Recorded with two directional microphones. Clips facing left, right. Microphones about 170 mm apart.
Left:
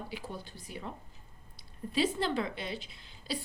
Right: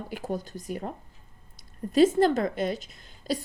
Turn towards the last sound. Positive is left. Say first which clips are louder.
# right 8 dB
turn(degrees=-45)  # may be behind; listen again after turning